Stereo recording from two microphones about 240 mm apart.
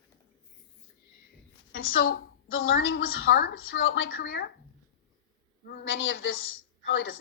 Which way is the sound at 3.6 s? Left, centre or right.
Left.